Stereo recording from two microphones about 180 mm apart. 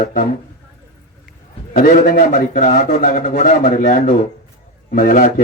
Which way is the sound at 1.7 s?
50° left (ahead or behind).